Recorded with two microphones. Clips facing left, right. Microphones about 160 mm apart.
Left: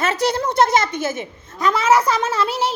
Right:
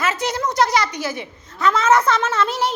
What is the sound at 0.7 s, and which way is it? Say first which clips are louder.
Speech: left 2 dB; 50° left (ahead or behind).